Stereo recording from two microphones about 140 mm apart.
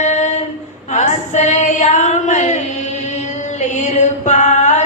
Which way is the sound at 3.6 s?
55° left (ahead or behind).